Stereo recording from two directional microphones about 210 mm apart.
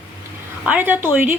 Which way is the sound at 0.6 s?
10° right (ahead or behind).